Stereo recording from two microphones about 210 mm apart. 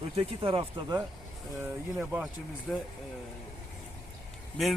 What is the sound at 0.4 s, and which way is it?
Speech, 25° right (ahead or behind).